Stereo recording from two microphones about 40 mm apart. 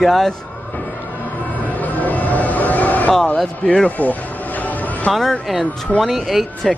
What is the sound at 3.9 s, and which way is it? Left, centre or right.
Music, left.